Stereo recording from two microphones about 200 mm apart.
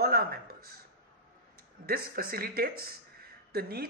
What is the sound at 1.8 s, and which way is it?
Speech, 50° right (ahead or behind).